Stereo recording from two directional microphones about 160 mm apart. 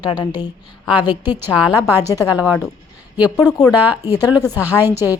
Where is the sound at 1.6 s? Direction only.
5° right (ahead or behind).